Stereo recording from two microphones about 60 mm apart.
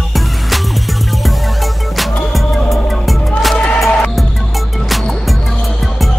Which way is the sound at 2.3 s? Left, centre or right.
Centre.